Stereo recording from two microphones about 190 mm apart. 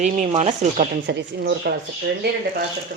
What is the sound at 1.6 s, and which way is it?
Speech, 60° right (ahead or behind).